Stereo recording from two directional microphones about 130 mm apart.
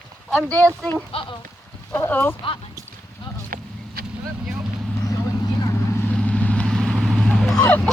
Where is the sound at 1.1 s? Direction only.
45° left (ahead or behind).